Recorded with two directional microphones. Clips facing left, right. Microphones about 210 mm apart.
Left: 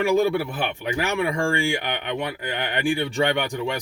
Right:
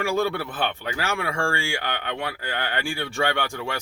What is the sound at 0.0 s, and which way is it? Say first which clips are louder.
Speech: left 4 dB; 15° left (ahead or behind).